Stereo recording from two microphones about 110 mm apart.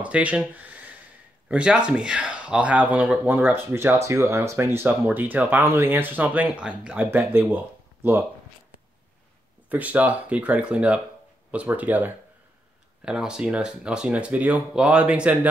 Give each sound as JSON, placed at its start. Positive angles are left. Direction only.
{"t": 0.0, "sound": "speech", "side_deg": -10}
{"t": 9.7, "sound": "speech", "side_deg": -15}